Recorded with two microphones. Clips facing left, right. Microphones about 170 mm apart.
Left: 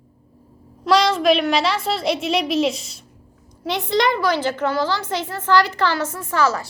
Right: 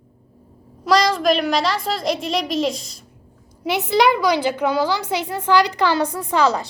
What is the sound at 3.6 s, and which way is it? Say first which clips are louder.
A woman's voice: right 3 dB; 10° right (ahead or behind).